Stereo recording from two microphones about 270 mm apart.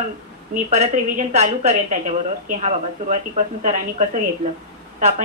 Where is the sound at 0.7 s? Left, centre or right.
Right.